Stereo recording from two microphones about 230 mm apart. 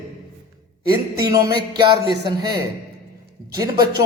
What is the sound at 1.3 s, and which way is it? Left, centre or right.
Speech, centre.